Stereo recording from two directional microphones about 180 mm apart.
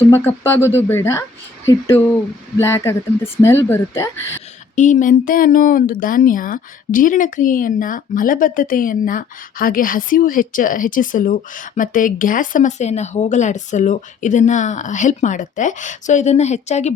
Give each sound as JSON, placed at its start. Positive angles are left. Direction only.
{"t": 0.1, "sound": "speech", "side_deg": 10}
{"t": 2.6, "sound": "speech", "side_deg": 15}
{"t": 4.7, "sound": "a woman's voice", "side_deg": 45}